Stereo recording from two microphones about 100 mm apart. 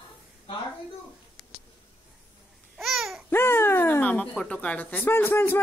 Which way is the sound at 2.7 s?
Centre (ahead or behind).